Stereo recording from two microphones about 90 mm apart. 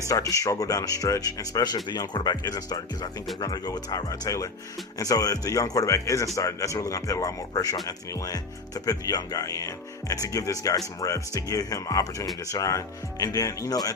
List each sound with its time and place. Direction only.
0.1 s speech: 40° left (ahead or behind)